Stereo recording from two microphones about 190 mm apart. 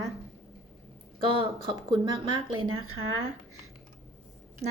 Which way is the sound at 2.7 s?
90° right.